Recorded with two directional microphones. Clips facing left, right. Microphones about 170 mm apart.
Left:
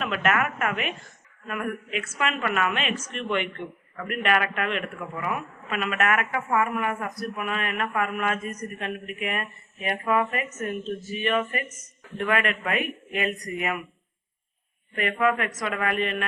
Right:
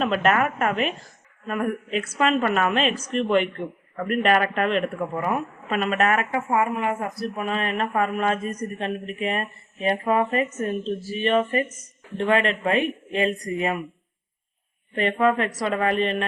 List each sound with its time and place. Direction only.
0.0 s speech: 35° right (ahead or behind)
14.9 s speech: 30° right (ahead or behind)